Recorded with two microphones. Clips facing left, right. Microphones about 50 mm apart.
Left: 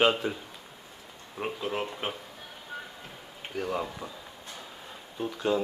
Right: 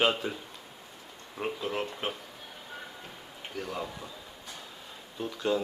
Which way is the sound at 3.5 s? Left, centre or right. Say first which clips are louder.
Left 5 dB; centre.